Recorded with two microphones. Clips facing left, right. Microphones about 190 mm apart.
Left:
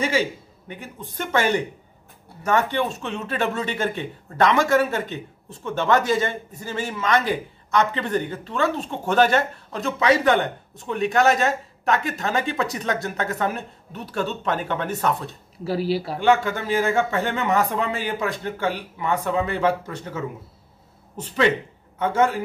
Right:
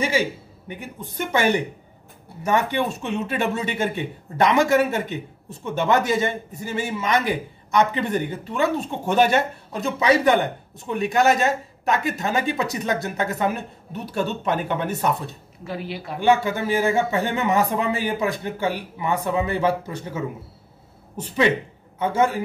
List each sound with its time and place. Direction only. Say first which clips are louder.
0.0 s speech: even; 15° right (ahead or behind)
15.6 s speech: left 7 dB; 35° left (ahead or behind)
16.2 s speech: right 2 dB; 15° right (ahead or behind)
21.9 s a man's voice: even; 10° right (ahead or behind)